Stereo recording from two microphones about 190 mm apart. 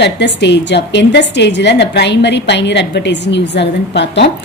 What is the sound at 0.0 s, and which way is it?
A woman's voice, 65° left (ahead or behind).